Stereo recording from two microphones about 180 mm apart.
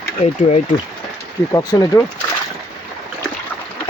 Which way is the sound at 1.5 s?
20° left (ahead or behind).